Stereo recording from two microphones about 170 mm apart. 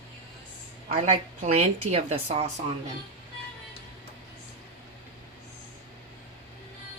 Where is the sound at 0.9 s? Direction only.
40° right (ahead or behind).